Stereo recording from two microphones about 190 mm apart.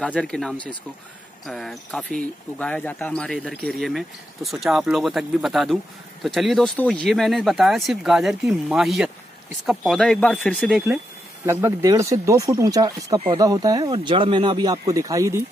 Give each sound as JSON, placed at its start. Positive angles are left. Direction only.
{"t": 0.0, "sound": "speech", "side_deg": 5}
{"t": 11.4, "sound": "speech", "side_deg": -15}